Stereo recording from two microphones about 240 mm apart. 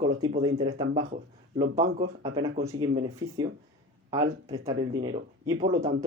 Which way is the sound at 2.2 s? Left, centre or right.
Centre.